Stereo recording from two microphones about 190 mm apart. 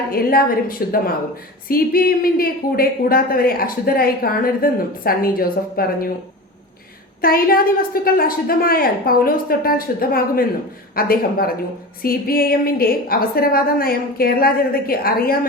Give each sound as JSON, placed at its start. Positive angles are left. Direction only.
{"t": 0.1, "sound": "a woman's voice", "side_deg": 50}
{"t": 7.2, "sound": "a woman's voice", "side_deg": 50}